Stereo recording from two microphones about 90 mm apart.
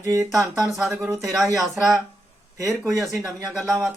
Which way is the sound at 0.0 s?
35° right (ahead or behind).